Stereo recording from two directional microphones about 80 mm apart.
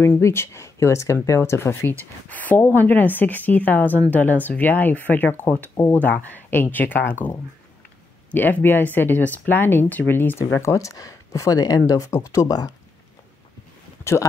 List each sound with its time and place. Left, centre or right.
0.2 s a woman's voice: left
10.5 s speech: left